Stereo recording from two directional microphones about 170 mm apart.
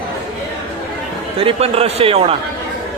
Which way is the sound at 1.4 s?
35° right (ahead or behind).